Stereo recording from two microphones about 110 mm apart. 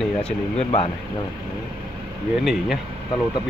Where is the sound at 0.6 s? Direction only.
60° left (ahead or behind).